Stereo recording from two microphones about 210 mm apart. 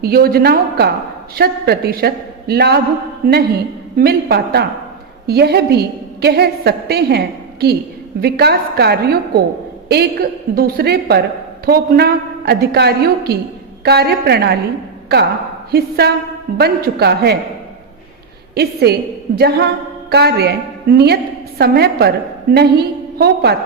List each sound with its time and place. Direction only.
0.0 s a woman's voice: 45° right (ahead or behind)
15.7 s a woman's voice: 50° right (ahead or behind)
18.5 s a woman's voice: 50° right (ahead or behind)